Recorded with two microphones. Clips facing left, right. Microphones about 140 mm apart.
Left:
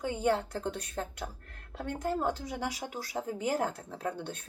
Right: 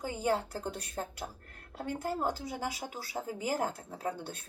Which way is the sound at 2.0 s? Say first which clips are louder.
Left 3 dB; 10° right (ahead or behind).